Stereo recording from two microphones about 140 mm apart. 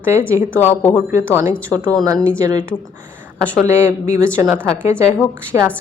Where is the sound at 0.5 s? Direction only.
15° left (ahead or behind).